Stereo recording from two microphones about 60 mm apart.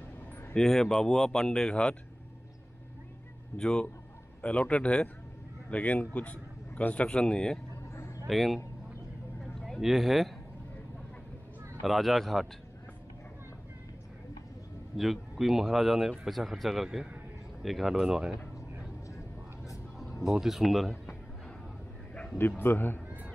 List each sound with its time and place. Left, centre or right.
0.6 s speech: centre
3.5 s speech: centre
8.3 s speech: centre
9.6 s speech: centre
11.8 s speech: centre
15.0 s speech: centre
20.2 s speech: centre
22.6 s speech: left